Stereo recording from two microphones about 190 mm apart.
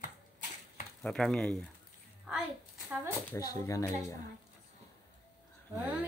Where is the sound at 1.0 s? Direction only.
5° left (ahead or behind).